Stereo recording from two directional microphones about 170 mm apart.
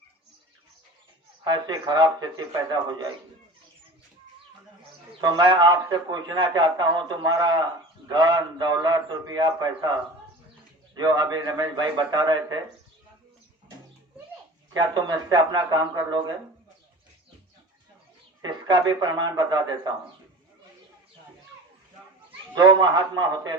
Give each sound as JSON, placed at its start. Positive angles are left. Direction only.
{"t": 1.5, "sound": "a man's voice", "side_deg": -25}
{"t": 5.2, "sound": "a man's voice", "side_deg": -25}
{"t": 10.9, "sound": "a man's voice", "side_deg": -25}
{"t": 14.7, "sound": "a man's voice", "side_deg": -25}
{"t": 18.4, "sound": "a man's voice", "side_deg": -25}
{"t": 22.3, "sound": "speech", "side_deg": -25}